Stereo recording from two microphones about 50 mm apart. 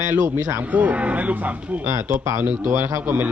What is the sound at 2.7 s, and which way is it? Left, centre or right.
Speech, right.